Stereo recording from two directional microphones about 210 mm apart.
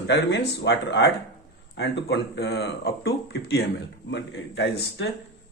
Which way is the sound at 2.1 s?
55° left (ahead or behind).